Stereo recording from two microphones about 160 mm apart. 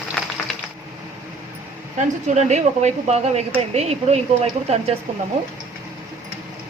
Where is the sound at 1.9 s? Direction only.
45° right (ahead or behind).